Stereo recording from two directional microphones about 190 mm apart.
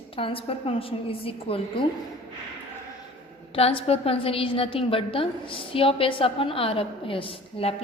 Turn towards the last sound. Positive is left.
turn(degrees=30)  # may be behind; listen again after turning